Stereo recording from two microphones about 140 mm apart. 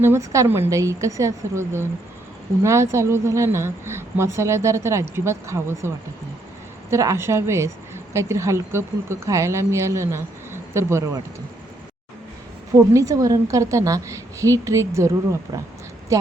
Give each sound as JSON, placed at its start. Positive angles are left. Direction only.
{"t": 0.0, "sound": "a woman's voice", "side_deg": -20}
{"t": 6.9, "sound": "a woman's voice", "side_deg": -20}
{"t": 12.7, "sound": "a woman's voice", "side_deg": -25}